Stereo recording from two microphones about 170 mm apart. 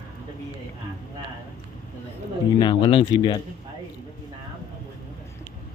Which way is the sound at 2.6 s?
30° left (ahead or behind).